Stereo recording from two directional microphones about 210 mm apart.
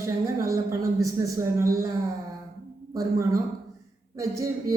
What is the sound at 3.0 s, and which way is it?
A woman's voice, 15° right (ahead or behind).